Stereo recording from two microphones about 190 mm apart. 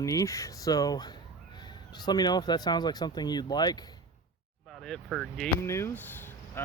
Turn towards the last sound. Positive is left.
turn(degrees=10)  # may be behind; listen again after turning